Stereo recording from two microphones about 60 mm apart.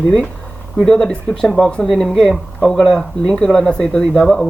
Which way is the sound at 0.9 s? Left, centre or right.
Centre.